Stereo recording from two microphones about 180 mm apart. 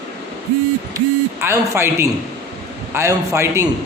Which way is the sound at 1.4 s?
15° right (ahead or behind).